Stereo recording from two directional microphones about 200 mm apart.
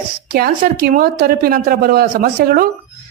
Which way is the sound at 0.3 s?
45° right (ahead or behind).